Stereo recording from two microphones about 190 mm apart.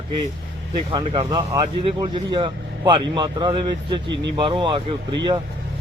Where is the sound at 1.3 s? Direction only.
20° right (ahead or behind).